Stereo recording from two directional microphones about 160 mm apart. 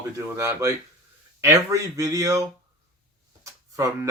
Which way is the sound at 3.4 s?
20° right (ahead or behind).